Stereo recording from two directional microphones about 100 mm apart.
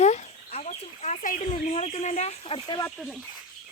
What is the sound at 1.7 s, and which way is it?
Speech, 80° left.